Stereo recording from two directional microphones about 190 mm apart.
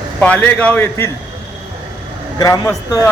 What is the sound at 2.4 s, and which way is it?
Speech, 20° left (ahead or behind).